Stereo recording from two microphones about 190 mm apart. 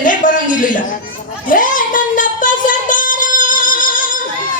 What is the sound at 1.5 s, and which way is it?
Music, 45° left (ahead or behind).